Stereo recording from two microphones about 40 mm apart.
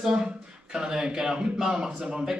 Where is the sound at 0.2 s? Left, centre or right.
Centre.